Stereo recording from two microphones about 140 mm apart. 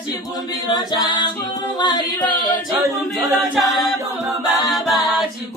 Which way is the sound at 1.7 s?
30° left (ahead or behind).